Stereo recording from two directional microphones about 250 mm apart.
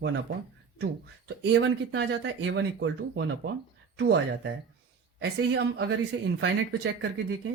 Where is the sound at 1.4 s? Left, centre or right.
Right.